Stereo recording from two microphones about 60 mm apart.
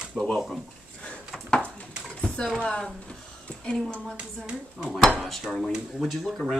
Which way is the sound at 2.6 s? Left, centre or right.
Centre.